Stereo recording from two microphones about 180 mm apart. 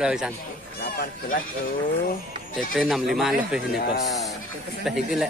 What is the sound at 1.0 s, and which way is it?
Speech, 55° left (ahead or behind).